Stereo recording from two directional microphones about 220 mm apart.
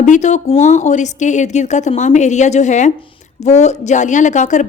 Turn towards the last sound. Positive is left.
turn(degrees=35)  # may be behind; listen again after turning